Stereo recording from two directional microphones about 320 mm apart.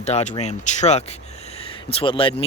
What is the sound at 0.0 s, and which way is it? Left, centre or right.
Speech, left.